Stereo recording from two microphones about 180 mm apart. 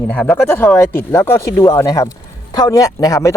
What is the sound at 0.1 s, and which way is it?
Speech, 5° left (ahead or behind).